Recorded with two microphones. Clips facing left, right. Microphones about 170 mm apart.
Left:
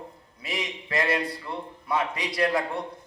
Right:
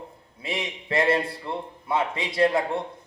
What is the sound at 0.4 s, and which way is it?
A man's voice, 25° right (ahead or behind).